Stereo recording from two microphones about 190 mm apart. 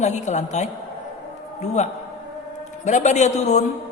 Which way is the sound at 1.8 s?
35° left (ahead or behind).